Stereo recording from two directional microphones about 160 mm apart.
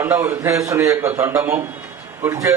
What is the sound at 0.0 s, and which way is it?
A man's voice, 15° right (ahead or behind).